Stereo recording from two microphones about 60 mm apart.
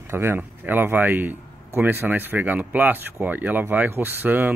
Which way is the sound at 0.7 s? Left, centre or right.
Right.